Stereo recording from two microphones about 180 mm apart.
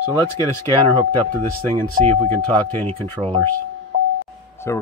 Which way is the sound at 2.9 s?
35° right (ahead or behind).